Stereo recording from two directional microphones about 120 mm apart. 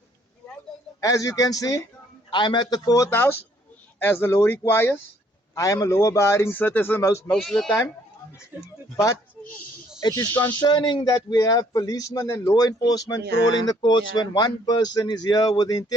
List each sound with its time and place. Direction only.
1.0 s a man's voice: 30° left (ahead or behind)
7.3 s speech: centre (ahead or behind)
10.0 s a man's voice: 30° left (ahead or behind)